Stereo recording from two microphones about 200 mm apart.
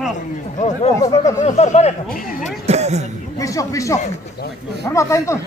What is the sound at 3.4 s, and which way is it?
Speech, 15° left (ahead or behind).